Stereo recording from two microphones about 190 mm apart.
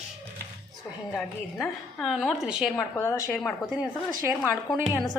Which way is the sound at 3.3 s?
Centre (ahead or behind).